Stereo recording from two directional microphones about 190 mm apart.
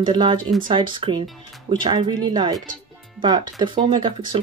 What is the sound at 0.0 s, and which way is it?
Speech, 25° right (ahead or behind).